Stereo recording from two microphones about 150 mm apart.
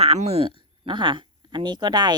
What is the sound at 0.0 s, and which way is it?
Speech, 40° right (ahead or behind).